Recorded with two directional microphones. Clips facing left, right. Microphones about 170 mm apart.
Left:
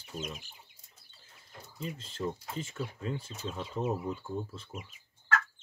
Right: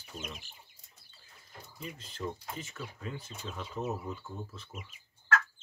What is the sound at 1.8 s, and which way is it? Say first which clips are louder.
Speech: left 4 dB; 25° left (ahead or behind).